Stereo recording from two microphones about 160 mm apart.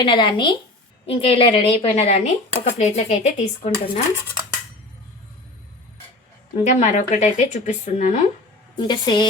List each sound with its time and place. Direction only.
0.0 s speech: 30° left (ahead or behind)
6.7 s a woman's voice: 45° left (ahead or behind)
8.7 s a woman's voice: 25° left (ahead or behind)